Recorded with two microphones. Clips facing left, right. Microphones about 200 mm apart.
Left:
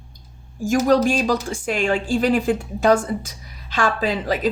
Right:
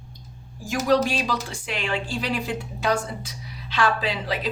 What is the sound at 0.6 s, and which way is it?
Speech, 45° left (ahead or behind).